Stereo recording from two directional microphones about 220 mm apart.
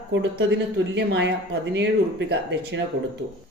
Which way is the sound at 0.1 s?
55° right (ahead or behind).